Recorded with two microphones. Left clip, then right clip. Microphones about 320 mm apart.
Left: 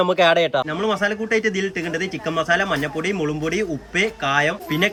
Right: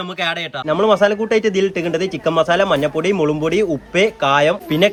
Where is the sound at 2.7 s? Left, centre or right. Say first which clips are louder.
Right 6 dB; centre.